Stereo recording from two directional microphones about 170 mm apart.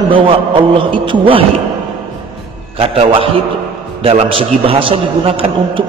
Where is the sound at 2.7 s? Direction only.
35° right (ahead or behind).